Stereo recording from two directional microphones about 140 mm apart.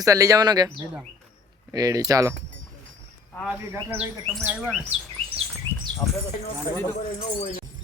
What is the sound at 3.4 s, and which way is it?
Speech, 15° right (ahead or behind).